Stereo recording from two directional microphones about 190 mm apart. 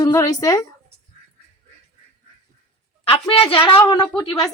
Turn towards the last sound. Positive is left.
turn(degrees=20)  # may be behind; listen again after turning